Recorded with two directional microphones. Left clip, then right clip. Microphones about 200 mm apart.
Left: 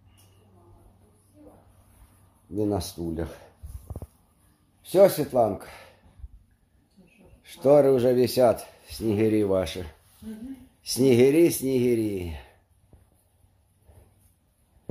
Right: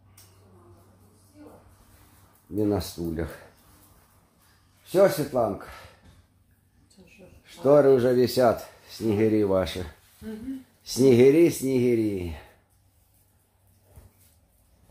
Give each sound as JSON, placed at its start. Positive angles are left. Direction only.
{"t": 2.5, "sound": "speech", "side_deg": 0}
{"t": 4.9, "sound": "speech", "side_deg": 25}
{"t": 7.4, "sound": "speech", "side_deg": 15}